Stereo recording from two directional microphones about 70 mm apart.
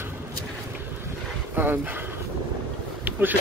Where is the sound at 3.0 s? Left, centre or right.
Right.